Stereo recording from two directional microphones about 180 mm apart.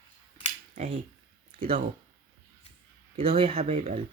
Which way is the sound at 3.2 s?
30° right (ahead or behind).